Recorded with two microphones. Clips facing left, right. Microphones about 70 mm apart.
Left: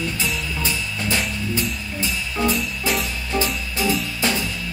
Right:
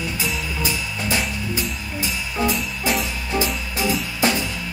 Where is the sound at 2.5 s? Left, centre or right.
Centre.